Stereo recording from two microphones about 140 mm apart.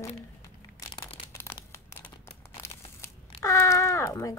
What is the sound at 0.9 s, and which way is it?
Crumpling, 40° left (ahead or behind).